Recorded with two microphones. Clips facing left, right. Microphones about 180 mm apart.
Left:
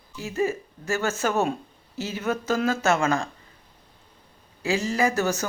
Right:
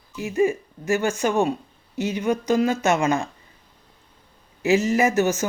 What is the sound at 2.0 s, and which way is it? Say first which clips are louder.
Speech: right 6 dB; 40° left (ahead or behind).